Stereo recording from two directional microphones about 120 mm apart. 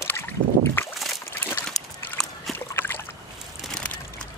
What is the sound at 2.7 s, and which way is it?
Boat, 15° left (ahead or behind).